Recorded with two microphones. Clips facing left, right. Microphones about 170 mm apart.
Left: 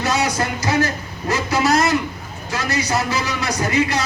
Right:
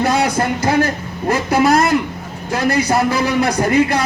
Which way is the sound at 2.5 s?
55° right (ahead or behind).